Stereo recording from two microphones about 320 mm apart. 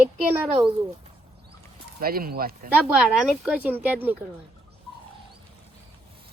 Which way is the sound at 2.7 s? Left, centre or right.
Centre.